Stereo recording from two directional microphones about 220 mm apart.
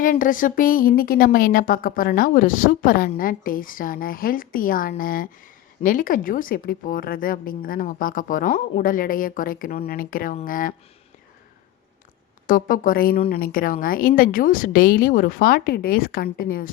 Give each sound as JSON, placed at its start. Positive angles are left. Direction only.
{"t": 0.0, "sound": "a woman's voice", "side_deg": 40}
{"t": 12.5, "sound": "a woman's voice", "side_deg": 40}